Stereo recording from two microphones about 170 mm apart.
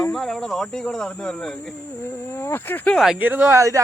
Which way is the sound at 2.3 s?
15° left (ahead or behind).